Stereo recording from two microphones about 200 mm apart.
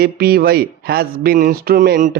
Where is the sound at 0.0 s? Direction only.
50° right (ahead or behind).